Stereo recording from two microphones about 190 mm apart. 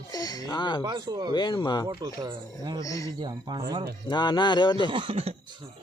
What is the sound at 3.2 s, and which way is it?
Speech, 20° right (ahead or behind).